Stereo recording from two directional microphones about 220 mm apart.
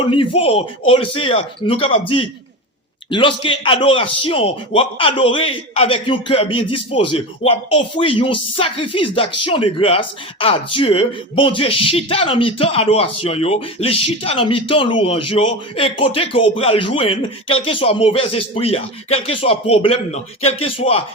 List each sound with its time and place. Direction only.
0.0 s speech: 25° left (ahead or behind)